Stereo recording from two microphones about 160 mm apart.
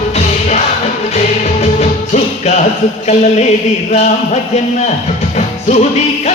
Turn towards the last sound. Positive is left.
turn(degrees=45)  # may be behind; listen again after turning